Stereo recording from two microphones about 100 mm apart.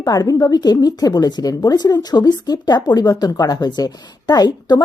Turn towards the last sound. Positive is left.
turn(degrees=45)  # may be behind; listen again after turning